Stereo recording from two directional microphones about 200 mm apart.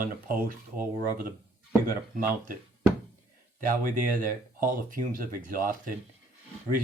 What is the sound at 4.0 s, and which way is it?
Speech, 45° right (ahead or behind).